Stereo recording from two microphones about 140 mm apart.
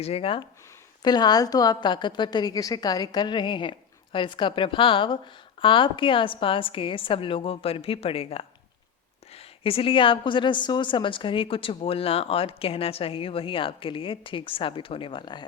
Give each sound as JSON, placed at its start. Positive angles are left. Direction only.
{"t": 0.0, "sound": "speech", "side_deg": 45}
{"t": 1.0, "sound": "a woman's voice", "side_deg": 30}